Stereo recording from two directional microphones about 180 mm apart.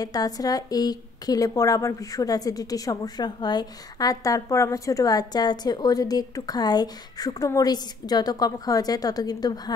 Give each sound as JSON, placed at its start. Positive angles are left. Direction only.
{"t": 0.0, "sound": "a woman's voice", "side_deg": 20}